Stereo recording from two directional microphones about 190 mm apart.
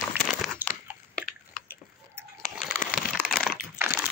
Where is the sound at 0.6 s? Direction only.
10° right (ahead or behind).